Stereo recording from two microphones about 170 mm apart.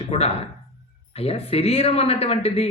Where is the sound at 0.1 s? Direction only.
35° left (ahead or behind).